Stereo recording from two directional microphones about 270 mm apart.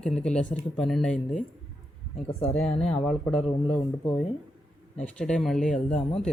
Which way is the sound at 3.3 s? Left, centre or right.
Left.